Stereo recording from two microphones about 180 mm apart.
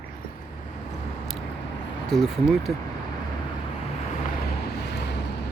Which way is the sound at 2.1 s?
Centre (ahead or behind).